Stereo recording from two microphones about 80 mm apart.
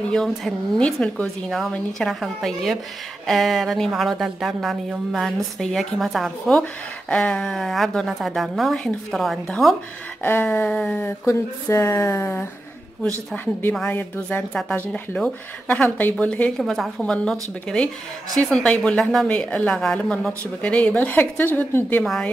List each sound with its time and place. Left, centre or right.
0.1 s a woman's voice: centre
7.1 s a woman's voice: centre
10.2 s a woman's voice: left
11.7 s speech: left
13.8 s a woman's voice: left
14.9 s speech: centre
16.5 s a woman's voice: centre
17.0 s speech: centre
20.6 s a woman's voice: centre